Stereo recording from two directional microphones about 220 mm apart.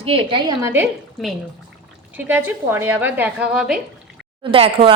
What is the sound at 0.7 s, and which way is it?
Speech, 10° right (ahead or behind).